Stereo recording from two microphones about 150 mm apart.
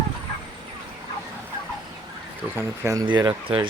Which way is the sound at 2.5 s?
20° right (ahead or behind).